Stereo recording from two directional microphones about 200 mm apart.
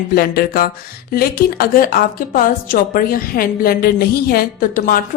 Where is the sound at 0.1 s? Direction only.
50° left (ahead or behind).